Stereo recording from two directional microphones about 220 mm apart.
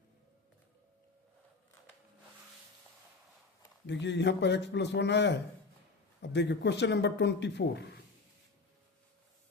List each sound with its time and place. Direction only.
3.8 s speech: 55° left (ahead or behind)